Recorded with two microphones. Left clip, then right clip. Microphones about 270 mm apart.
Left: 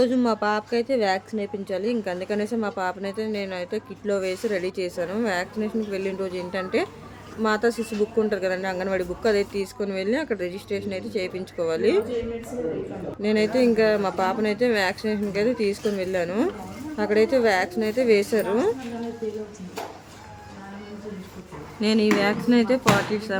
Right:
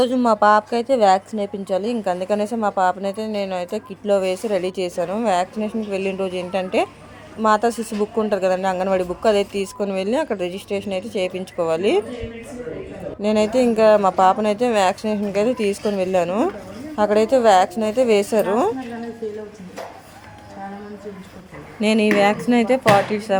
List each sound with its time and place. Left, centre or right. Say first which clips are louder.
0.0 s a woman's voice: right 6 dB; centre
13.2 s a woman's voice: right 3 dB; centre
21.8 s a woman's voice: right 5 dB; centre